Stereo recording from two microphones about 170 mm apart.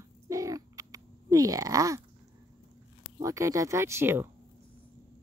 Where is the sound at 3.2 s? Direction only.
20° right (ahead or behind).